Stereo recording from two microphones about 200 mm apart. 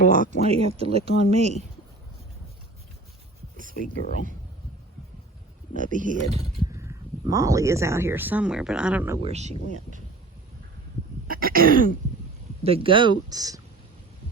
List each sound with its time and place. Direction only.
0.1 s speech: 40° right (ahead or behind)
5.7 s speech: 40° right (ahead or behind)
6.7 s speech: 15° right (ahead or behind)
9.2 s speech: 35° right (ahead or behind)
11.3 s throat clearing: 45° right (ahead or behind)
12.6 s speech: 30° right (ahead or behind)